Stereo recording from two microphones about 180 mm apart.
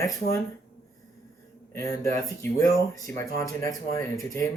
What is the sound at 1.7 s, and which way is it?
Speech, 15° left (ahead or behind).